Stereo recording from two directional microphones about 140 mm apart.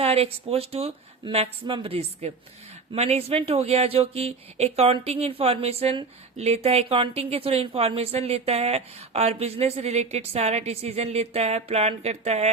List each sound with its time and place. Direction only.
0.0 s speech: 45° right (ahead or behind)